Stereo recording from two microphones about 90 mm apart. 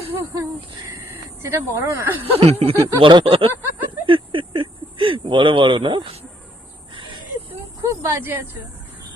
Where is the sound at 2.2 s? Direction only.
90° right.